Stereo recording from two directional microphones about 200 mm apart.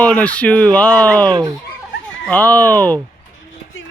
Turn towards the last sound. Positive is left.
turn(degrees=10)  # may be behind; listen again after turning